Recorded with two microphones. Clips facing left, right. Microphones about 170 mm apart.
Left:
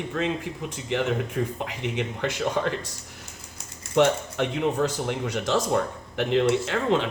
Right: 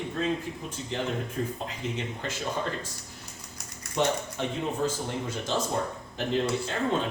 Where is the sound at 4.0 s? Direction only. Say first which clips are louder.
Left 6 dB; 70° left (ahead or behind).